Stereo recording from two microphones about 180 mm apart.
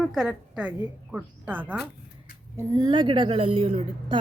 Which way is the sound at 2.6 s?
20° right (ahead or behind).